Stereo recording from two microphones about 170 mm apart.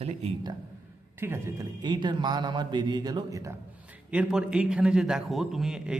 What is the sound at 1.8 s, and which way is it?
Speech, 25° right (ahead or behind).